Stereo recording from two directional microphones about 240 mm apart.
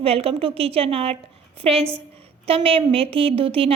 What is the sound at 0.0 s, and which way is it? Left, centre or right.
A woman's voice, right.